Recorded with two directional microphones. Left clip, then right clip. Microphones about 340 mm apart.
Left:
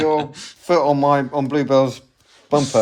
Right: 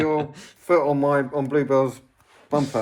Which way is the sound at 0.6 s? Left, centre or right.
Left.